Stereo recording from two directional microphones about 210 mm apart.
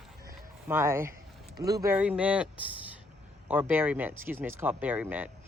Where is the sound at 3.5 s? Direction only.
10° right (ahead or behind).